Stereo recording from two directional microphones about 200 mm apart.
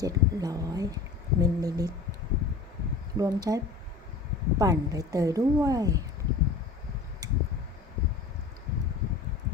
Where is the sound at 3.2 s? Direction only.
15° right (ahead or behind).